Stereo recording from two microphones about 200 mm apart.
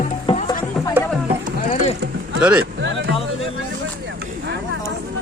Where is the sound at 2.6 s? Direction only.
65° right (ahead or behind).